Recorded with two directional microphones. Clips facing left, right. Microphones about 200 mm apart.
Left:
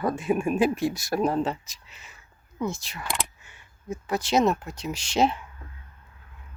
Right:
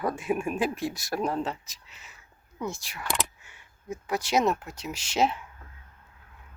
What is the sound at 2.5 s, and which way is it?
Speech, 10° right (ahead or behind).